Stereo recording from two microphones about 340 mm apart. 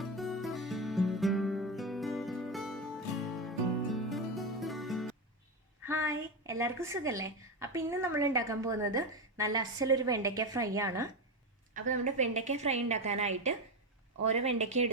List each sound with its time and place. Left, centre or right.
0.0 s music: centre
5.8 s a woman's voice: centre
11.7 s a woman's voice: right
14.4 s a woman's voice: centre